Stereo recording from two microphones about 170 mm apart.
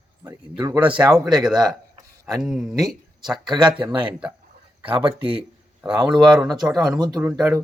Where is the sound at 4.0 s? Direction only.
5° right (ahead or behind).